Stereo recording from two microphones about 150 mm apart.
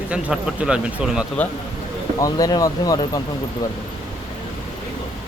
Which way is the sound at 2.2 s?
25° left (ahead or behind).